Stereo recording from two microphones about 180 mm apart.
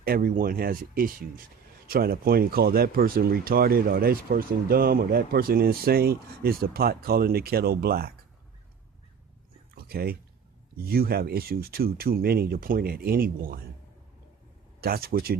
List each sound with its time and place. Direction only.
0.0 s speech: 55° right (ahead or behind)
9.7 s speech: 60° right (ahead or behind)
14.8 s speech: 55° right (ahead or behind)